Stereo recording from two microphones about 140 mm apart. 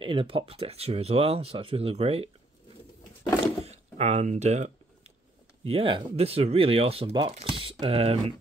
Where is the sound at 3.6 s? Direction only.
50° right (ahead or behind).